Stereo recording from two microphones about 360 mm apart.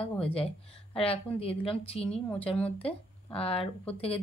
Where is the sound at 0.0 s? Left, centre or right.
Centre.